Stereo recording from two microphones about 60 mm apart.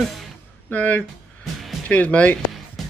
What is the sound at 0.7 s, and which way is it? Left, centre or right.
Speech, left.